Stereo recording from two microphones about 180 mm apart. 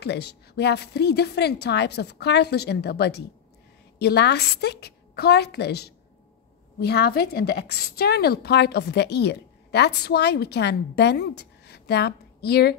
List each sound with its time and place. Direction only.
0.0 s a woman's voice: 70° left (ahead or behind)